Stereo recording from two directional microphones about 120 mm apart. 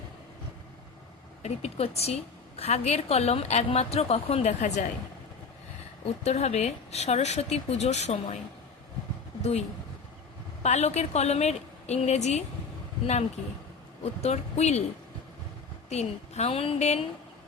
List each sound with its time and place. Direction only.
1.4 s a woman's voice: 60° left (ahead or behind); by 4.9 s 80° left
6.2 s speech: 65° left (ahead or behind)
9.4 s speech: 65° left (ahead or behind)
14.0 s speech: 60° left (ahead or behind)
15.9 s a woman's voice: 65° left (ahead or behind)